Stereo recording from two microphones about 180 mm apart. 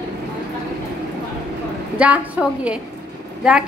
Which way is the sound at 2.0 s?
5° right (ahead or behind).